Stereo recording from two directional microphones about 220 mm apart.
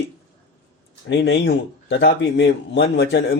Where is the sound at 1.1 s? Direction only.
50° left (ahead or behind).